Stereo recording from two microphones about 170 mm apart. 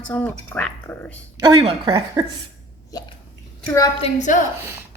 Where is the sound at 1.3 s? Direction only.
30° right (ahead or behind).